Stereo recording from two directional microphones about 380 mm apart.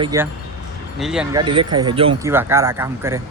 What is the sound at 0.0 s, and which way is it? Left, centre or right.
Speech, centre.